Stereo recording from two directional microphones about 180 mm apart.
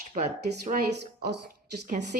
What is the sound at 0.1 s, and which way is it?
Speech, 40° right (ahead or behind).